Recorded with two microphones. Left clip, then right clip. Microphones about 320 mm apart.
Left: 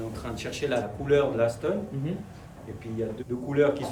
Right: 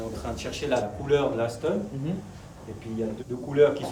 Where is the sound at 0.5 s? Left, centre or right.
Centre.